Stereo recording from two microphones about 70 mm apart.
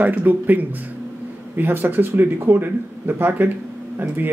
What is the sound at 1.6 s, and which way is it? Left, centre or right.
Speech, right.